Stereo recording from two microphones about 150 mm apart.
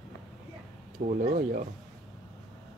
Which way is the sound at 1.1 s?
60° right (ahead or behind).